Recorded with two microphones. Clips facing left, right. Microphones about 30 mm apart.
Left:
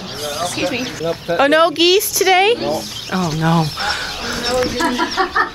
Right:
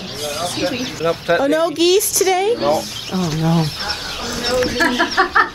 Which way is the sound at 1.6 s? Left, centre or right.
Left.